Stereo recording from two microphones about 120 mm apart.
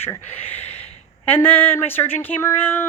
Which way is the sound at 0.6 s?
60° left (ahead or behind).